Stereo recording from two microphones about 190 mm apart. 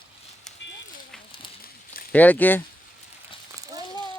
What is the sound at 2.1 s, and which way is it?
Speech, 10° left (ahead or behind).